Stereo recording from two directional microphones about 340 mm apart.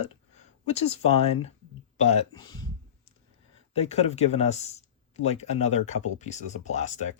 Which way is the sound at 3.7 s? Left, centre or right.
Centre.